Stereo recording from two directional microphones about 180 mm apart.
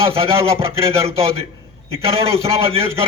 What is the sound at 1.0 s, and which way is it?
A man's voice, 35° right (ahead or behind).